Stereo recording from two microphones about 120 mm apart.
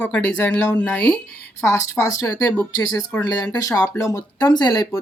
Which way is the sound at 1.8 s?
25° left (ahead or behind).